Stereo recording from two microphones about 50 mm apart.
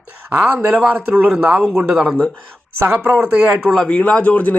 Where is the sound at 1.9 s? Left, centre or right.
Right.